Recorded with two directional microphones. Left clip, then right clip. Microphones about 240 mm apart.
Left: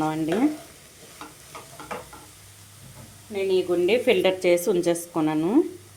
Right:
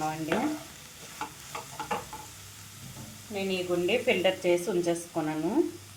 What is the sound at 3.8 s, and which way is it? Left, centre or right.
Dishes, left.